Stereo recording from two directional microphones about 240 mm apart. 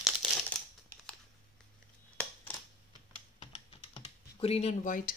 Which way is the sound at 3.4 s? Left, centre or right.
Left.